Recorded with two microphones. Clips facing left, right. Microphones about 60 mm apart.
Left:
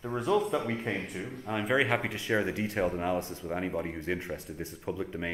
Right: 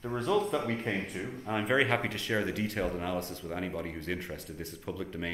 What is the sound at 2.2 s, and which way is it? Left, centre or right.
Speech, centre.